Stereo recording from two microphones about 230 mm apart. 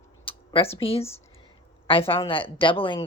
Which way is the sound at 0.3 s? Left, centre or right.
Left.